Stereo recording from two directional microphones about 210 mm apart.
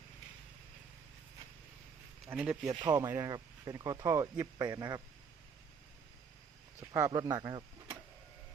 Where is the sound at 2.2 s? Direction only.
5° right (ahead or behind).